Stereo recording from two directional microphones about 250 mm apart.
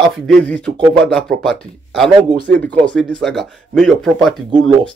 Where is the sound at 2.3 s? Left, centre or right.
Right.